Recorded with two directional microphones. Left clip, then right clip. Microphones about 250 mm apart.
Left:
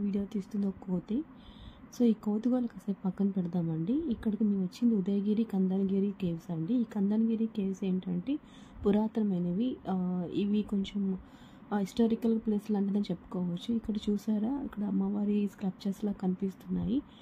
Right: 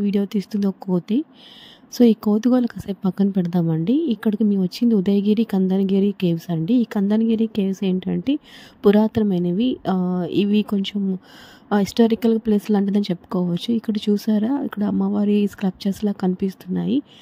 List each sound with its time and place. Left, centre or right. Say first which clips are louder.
0.0 s speech: right 13 dB; right